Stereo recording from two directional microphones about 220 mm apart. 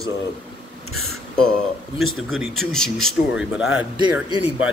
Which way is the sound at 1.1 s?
5° left (ahead or behind).